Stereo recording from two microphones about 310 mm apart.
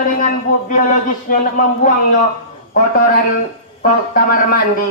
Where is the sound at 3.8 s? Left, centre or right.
Left.